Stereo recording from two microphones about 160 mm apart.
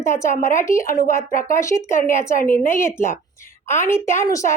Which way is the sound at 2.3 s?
60° left (ahead or behind).